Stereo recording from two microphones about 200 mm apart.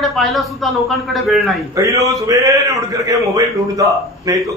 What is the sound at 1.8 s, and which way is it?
A man's voice, 15° right (ahead or behind).